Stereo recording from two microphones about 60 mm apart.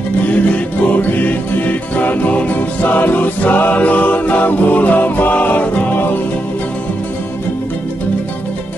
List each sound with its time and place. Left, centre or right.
0.9 s music: left